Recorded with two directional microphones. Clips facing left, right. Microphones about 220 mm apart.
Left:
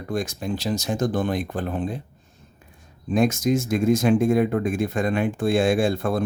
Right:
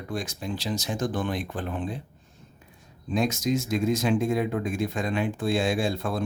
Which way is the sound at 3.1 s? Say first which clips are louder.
Left 5 dB; 50° left (ahead or behind).